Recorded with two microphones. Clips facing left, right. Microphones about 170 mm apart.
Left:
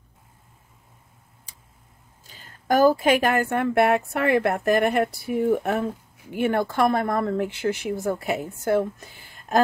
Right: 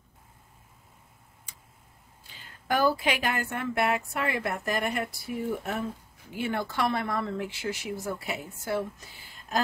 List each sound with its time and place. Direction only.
1.5 s tick-tock: 35° left (ahead or behind)
2.2 s a woman's voice: 40° left (ahead or behind)